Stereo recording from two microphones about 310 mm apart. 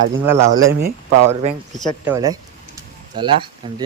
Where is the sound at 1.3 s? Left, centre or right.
Centre.